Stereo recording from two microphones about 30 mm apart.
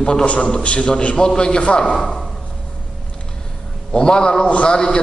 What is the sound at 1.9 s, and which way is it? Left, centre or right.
Speech, centre.